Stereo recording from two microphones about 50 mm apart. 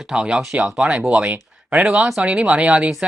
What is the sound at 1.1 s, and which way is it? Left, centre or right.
Speech, right.